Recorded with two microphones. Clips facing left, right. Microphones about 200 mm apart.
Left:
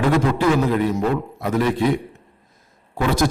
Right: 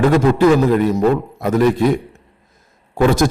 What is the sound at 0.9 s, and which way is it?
Speech, 45° right (ahead or behind).